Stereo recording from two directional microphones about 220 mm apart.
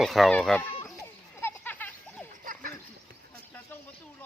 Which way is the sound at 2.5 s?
35° right (ahead or behind).